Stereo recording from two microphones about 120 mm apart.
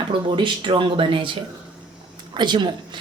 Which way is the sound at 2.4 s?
40° right (ahead or behind).